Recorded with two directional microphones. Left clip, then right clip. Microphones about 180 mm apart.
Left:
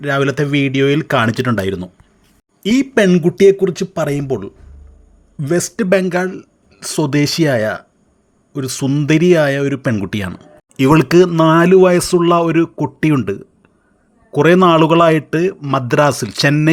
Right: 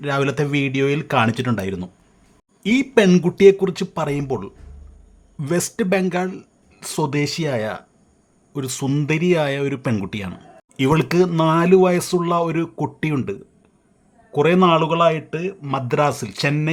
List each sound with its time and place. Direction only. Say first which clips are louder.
0.0 s speech: left 5 dB; 10° left (ahead or behind)
9.0 s speech: left 8 dB; 20° left (ahead or behind)
10.1 s speech: left 7 dB; 25° left (ahead or behind)
13.1 s speech: left 8 dB; 20° left (ahead or behind)